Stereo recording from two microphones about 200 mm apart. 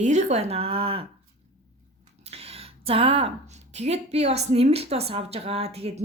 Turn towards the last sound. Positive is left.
turn(degrees=-30)  # may be behind; listen again after turning